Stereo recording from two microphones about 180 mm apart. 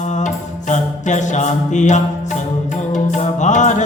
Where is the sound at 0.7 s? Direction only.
40° left (ahead or behind).